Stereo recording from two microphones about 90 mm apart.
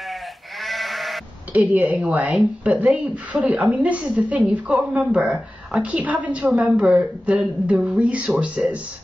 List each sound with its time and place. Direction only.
0.1 s sheep: centre (ahead or behind)
1.5 s a woman's voice: 20° right (ahead or behind)